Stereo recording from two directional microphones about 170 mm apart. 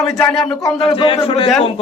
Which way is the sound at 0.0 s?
5° left (ahead or behind).